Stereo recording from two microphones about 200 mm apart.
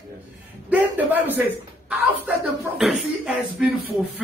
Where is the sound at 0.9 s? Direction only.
10° right (ahead or behind).